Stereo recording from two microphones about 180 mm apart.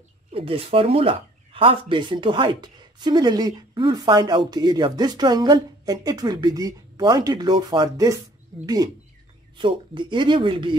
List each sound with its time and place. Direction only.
0.3 s speech: 30° right (ahead or behind)